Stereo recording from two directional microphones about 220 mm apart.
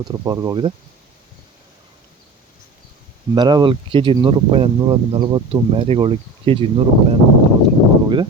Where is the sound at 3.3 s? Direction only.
20° right (ahead or behind).